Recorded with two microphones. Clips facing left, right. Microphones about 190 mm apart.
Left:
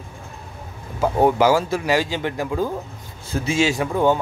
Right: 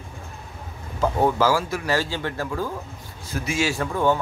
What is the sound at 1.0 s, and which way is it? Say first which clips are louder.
A man's voice: left 4 dB; 15° left (ahead or behind).